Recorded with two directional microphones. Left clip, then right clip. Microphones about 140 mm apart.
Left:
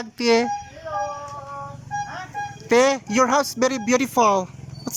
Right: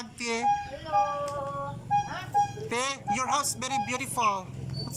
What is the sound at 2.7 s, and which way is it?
A man's voice, 80° left.